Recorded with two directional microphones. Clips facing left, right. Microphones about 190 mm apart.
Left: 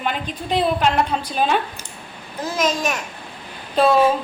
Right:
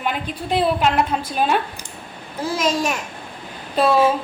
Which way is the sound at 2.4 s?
30° right (ahead or behind).